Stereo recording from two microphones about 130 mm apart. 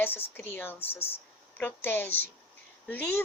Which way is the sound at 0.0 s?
15° left (ahead or behind).